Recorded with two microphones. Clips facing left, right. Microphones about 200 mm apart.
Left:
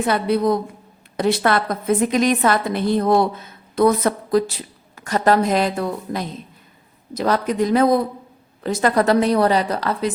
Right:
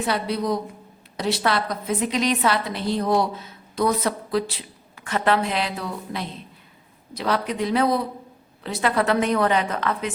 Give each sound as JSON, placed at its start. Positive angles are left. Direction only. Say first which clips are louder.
{"t": 0.0, "sound": "a woman's voice", "louder": "left 6 dB", "side_deg": 55}